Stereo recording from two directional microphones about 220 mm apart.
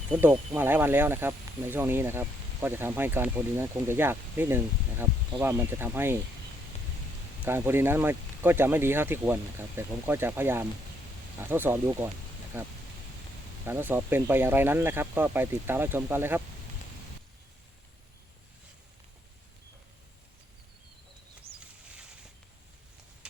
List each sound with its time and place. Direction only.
0.1 s speech: 5° right (ahead or behind)
7.4 s speech: 10° right (ahead or behind)
13.7 s speech: 10° right (ahead or behind)
21.5 s a sound: 25° right (ahead or behind)